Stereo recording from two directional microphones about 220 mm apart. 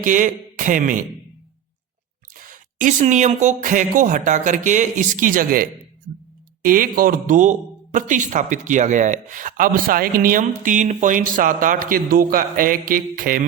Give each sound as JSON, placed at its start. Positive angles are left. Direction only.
{"t": 0.0, "sound": "speech", "side_deg": -35}
{"t": 2.3, "sound": "speech", "side_deg": -40}